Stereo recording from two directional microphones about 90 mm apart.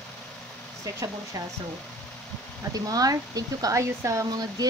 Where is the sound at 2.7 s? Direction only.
40° right (ahead or behind).